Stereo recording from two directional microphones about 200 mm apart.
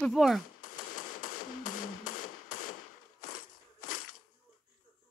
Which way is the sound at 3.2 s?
90° left.